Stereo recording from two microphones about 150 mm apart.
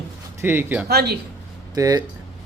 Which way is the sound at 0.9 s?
90° right.